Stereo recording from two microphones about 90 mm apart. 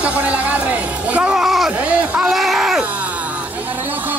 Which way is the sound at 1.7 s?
15° right (ahead or behind).